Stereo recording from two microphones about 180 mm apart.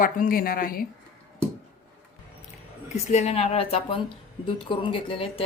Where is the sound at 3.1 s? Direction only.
35° left (ahead or behind).